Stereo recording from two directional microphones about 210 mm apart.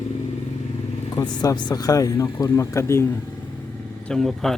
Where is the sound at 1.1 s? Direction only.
20° left (ahead or behind).